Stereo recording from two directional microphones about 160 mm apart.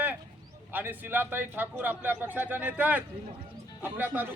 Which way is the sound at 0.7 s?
10° right (ahead or behind).